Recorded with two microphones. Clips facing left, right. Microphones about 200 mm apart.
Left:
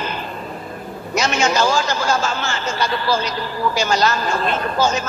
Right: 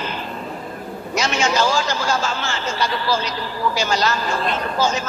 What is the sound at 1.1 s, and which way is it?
A man's voice, 50° left (ahead or behind).